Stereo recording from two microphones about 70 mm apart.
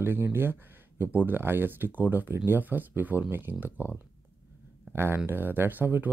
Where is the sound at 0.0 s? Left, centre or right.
Right.